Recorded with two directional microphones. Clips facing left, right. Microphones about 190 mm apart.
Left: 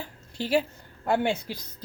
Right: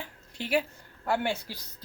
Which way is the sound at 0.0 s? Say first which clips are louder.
Left 5 dB; 30° left (ahead or behind).